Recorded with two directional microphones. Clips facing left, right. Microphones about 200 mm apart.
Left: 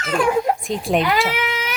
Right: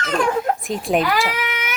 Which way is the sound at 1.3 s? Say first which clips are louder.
Left 2 dB; 25° left (ahead or behind).